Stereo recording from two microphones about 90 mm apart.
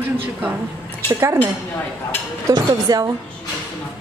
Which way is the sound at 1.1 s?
30° right (ahead or behind).